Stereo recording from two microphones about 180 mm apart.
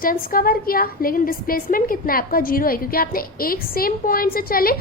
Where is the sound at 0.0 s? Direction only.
50° left (ahead or behind).